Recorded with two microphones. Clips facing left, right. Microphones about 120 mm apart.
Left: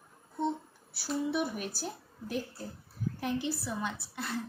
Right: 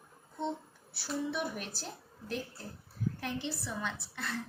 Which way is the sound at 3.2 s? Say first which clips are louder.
Left 4 dB; 10° left (ahead or behind).